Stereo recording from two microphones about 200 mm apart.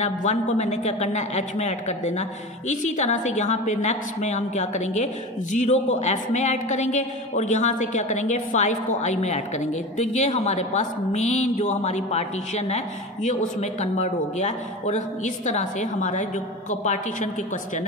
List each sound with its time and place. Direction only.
0.0 s a woman's voice: 35° left (ahead or behind)